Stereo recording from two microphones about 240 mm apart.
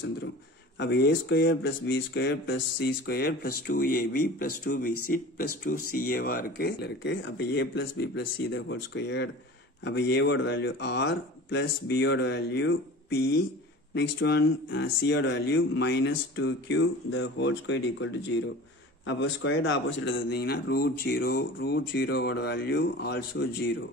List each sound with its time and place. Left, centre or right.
0.7 s speech: left